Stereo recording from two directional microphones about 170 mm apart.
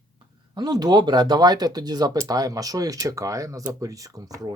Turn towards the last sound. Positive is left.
turn(degrees=-20)  # may be behind; listen again after turning